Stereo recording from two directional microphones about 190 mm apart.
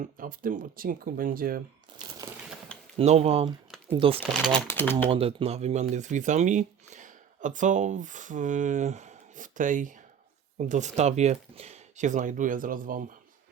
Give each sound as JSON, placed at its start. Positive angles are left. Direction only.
{"t": 0.0, "sound": "speech", "side_deg": -45}
{"t": 3.0, "sound": "speech", "side_deg": -35}
{"t": 4.7, "sound": "speech", "side_deg": 10}
{"t": 5.0, "sound": "speech", "side_deg": -30}